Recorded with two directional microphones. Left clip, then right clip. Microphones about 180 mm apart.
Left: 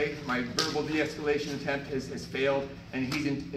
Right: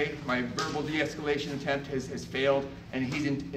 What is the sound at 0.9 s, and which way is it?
A man's voice, 20° right (ahead or behind).